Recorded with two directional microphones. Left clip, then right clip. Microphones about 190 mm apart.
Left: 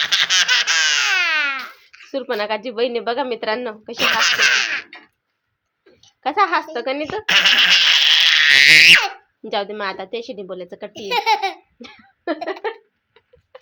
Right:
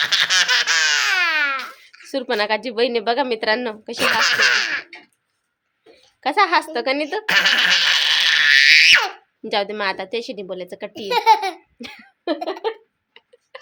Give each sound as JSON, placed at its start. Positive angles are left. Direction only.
{"t": 0.0, "sound": "laughter", "side_deg": -15}
{"t": 6.0, "sound": "speech", "side_deg": -15}
{"t": 11.1, "sound": "laughter", "side_deg": -20}
{"t": 13.2, "sound": "tick-tock", "side_deg": -10}